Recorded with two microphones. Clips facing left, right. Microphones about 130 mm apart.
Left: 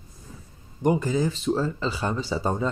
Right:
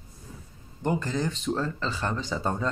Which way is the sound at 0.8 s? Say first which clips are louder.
Left 5 dB; 15° left (ahead or behind).